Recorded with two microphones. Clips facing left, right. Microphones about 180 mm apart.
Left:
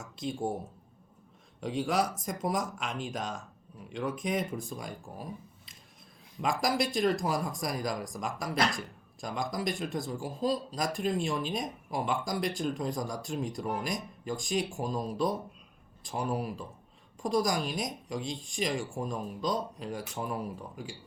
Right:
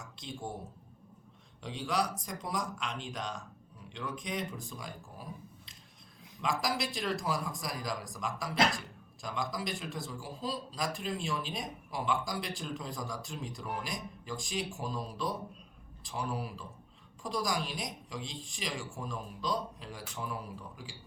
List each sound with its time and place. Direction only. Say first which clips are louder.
1.8 s speech: left 3 dB; 45° left (ahead or behind)